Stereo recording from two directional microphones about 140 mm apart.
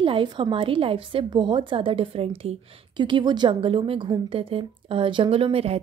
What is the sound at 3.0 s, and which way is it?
Speech, 35° right (ahead or behind).